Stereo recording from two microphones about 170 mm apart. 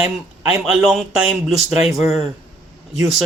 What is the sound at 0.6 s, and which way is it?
Speech, centre (ahead or behind).